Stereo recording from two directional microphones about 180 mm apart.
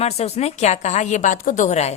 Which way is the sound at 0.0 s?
35° left (ahead or behind).